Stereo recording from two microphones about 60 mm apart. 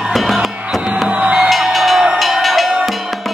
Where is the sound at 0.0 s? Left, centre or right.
Centre.